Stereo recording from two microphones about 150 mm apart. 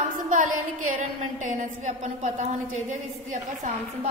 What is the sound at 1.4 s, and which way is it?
A woman's voice, 55° right (ahead or behind).